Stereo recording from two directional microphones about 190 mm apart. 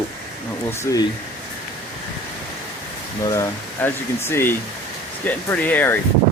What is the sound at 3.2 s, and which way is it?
Speech, 15° left (ahead or behind).